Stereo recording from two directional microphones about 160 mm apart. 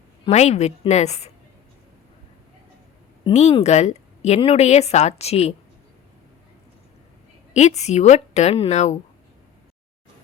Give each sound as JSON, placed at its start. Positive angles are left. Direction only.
{"t": 0.3, "sound": "a woman's voice", "side_deg": 45}
{"t": 3.3, "sound": "a woman's voice", "side_deg": 45}
{"t": 7.5, "sound": "a woman's voice", "side_deg": 45}